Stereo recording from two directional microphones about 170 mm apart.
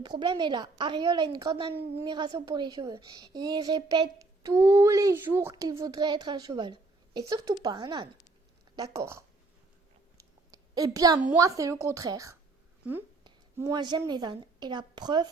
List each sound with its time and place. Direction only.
0.0 s a woman's voice: 25° right (ahead or behind)
10.2 s clicking: 20° right (ahead or behind)
11.3 s a woman's voice: 20° right (ahead or behind)
13.6 s a woman's voice: 25° right (ahead or behind)